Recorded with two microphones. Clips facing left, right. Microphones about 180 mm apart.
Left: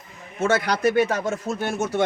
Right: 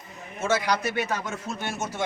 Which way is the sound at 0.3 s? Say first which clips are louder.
Left 3 dB; 55° left (ahead or behind).